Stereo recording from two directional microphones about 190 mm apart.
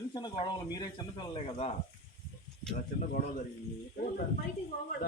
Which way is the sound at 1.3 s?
30° left (ahead or behind).